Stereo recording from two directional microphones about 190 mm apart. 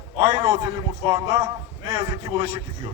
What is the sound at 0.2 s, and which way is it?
A man's voice, 25° right (ahead or behind).